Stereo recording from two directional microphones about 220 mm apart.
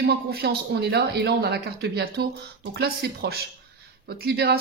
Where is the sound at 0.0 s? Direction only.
45° right (ahead or behind).